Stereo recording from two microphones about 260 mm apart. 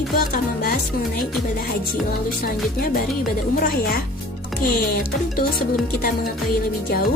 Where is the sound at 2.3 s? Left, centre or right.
Left.